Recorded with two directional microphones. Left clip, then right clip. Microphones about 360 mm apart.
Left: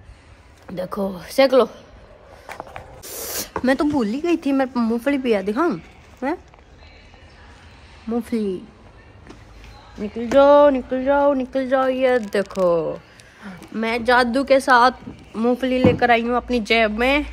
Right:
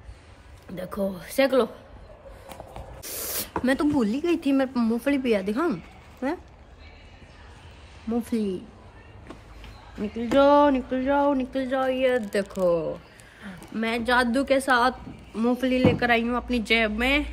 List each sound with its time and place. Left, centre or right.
0.7 s a woman's voice: centre
3.0 s a sound: centre
3.6 s speech: centre
8.1 s speech: centre
10.1 s a woman's voice: centre